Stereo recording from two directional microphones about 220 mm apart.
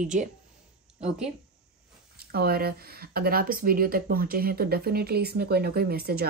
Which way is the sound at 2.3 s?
45° right (ahead or behind).